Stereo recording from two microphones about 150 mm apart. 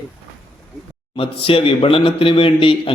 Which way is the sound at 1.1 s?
40° left (ahead or behind).